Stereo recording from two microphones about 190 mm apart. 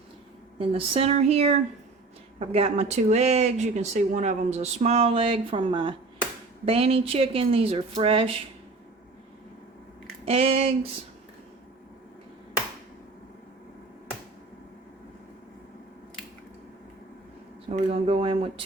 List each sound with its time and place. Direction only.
0.6 s a woman's voice: 30° right (ahead or behind)
10.2 s speech: 30° right (ahead or behind)
17.7 s a woman's voice: 35° right (ahead or behind)